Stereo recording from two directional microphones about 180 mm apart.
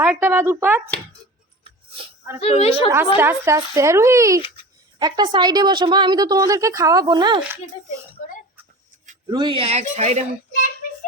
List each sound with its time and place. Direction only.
0.0 s speech: 10° right (ahead or behind)
2.4 s a woman's voice: 35° left (ahead or behind)
3.2 s a woman's voice: 15° right (ahead or behind)
9.3 s speech: 25° right (ahead or behind)